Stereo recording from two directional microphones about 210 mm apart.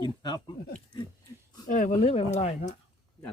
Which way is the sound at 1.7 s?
35° left (ahead or behind).